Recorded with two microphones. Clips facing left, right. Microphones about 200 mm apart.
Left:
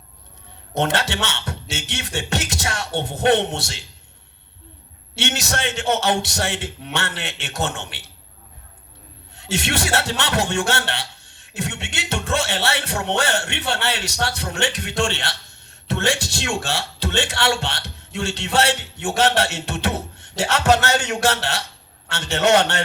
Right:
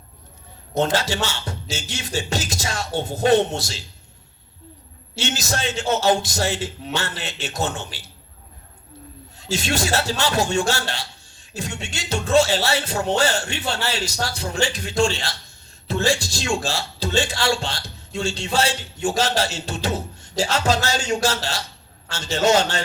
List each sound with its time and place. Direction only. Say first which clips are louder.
0.8 s speech: right 1 dB; 65° left (ahead or behind)
5.1 s speech: left 1 dB; 65° left (ahead or behind)
9.3 s speech: even; 65° left (ahead or behind)